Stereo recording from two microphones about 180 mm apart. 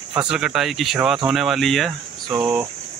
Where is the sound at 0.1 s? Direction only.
5° right (ahead or behind).